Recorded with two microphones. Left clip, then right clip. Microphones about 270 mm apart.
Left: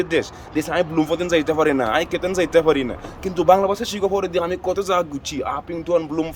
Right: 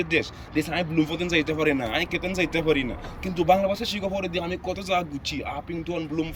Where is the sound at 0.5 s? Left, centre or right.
Centre.